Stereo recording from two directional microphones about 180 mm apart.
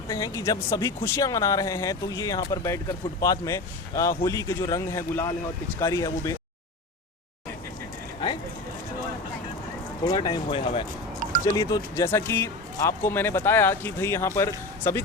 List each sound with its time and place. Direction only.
0.1 s speech: 20° left (ahead or behind)
10.0 s speech: 25° left (ahead or behind)
11.5 s speech: 20° left (ahead or behind)